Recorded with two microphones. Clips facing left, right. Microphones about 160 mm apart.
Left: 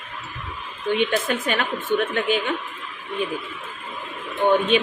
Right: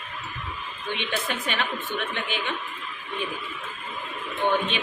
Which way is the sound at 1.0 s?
45° left (ahead or behind).